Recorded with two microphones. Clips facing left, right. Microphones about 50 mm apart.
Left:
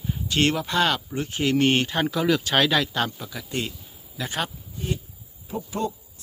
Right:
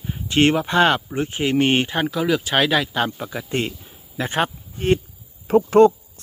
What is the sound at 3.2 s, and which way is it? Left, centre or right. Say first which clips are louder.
Speech: right 6 dB; right.